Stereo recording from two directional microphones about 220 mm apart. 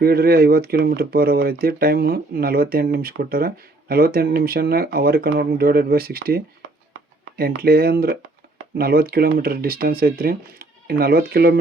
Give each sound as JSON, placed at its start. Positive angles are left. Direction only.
{"t": 0.0, "sound": "speech", "side_deg": -45}